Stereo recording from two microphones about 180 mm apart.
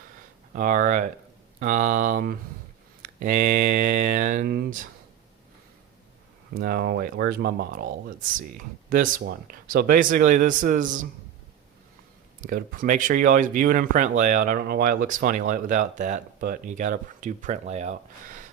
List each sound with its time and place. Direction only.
0.5 s speech: 45° right (ahead or behind)
6.5 s speech: 60° right (ahead or behind)
12.4 s speech: 50° right (ahead or behind)